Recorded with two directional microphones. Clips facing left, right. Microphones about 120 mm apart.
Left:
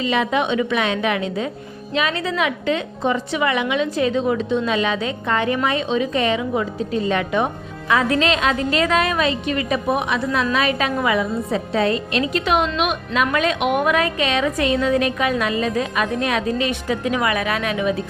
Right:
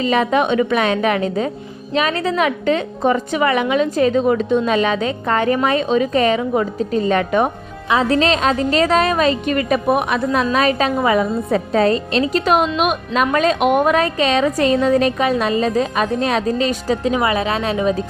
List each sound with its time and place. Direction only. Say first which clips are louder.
0.0 s a woman's voice: right 4 dB; 45° right (ahead or behind)
8.0 s a woman's voice: right 5 dB; 35° right (ahead or behind)
10.5 s a woman's voice: right 4 dB; 40° right (ahead or behind)